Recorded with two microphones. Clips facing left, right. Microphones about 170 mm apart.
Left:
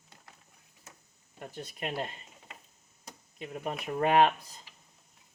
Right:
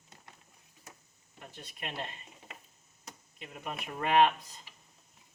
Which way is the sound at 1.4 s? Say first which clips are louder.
Left 6 dB; 40° left (ahead or behind).